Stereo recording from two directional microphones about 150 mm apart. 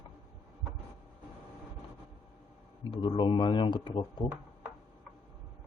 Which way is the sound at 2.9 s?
30° left (ahead or behind).